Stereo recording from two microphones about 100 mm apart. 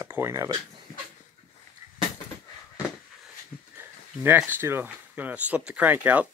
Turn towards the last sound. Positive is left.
turn(degrees=-15)  # may be behind; listen again after turning